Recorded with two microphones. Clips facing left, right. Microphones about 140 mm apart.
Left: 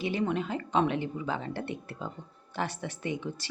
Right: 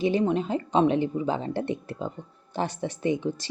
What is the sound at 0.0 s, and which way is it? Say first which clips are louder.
Speech: right 6 dB; 20° right (ahead or behind).